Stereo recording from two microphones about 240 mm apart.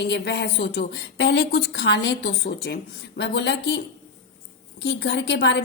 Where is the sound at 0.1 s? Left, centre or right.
Left.